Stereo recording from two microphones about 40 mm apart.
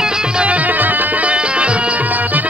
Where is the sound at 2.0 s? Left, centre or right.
Right.